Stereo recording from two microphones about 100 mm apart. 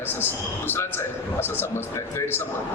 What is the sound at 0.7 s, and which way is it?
A man's voice, 20° left (ahead or behind).